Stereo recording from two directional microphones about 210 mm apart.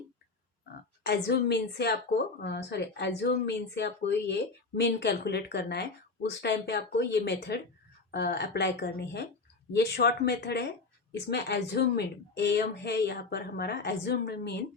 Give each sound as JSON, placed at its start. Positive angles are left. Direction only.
{"t": 0.6, "sound": "a woman's voice", "side_deg": 50}